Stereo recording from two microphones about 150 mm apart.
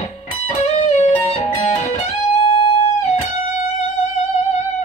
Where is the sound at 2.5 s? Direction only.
30° left (ahead or behind).